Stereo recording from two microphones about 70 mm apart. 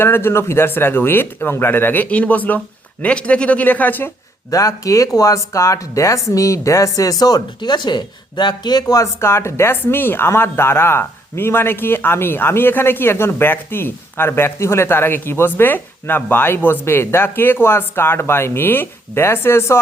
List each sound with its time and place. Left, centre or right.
0.0 s a man's voice: left
4.5 s speech: left
9.2 s a man's voice: left